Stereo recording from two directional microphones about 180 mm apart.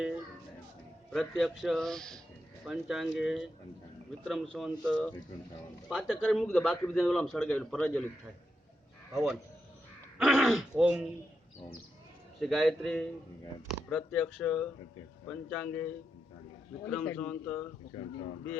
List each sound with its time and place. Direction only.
1.1 s a man's voice: centre (ahead or behind)
4.5 s a man's voice: centre (ahead or behind)
9.1 s a man's voice: centre (ahead or behind)
12.4 s a man's voice: centre (ahead or behind)
17.9 s speech: 30° left (ahead or behind)